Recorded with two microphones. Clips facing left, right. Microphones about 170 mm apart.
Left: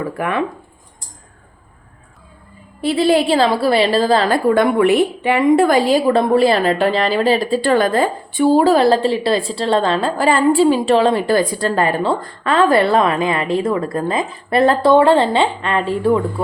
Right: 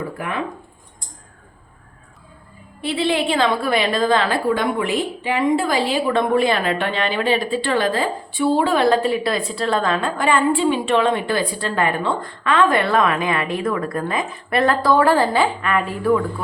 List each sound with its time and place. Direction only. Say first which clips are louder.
0.2 s speech: left 7 dB; 70° left (ahead or behind)
2.8 s a woman's voice: left 6 dB; 40° left (ahead or behind)
4.5 s a woman's voice: left 8 dB; 60° left (ahead or behind); by 16.2 s 30° left (ahead or behind)